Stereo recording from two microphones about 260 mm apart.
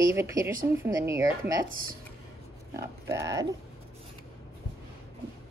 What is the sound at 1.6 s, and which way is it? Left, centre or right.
Speech, right.